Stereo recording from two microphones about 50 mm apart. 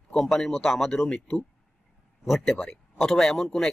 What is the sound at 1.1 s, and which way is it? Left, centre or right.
Speech, centre.